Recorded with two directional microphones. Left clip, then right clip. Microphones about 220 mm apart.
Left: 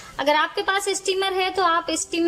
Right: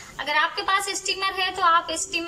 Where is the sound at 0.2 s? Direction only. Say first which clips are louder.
Left 3 dB; 30° left (ahead or behind).